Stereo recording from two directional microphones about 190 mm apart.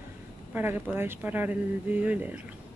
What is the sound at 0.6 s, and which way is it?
Speech, 10° right (ahead or behind).